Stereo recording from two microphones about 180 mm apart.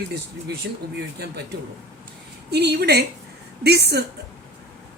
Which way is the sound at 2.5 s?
65° right (ahead or behind).